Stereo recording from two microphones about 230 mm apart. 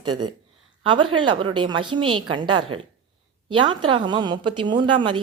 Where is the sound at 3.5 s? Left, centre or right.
Right.